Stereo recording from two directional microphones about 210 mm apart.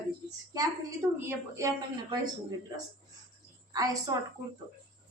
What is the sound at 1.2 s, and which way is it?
Speech, 10° right (ahead or behind).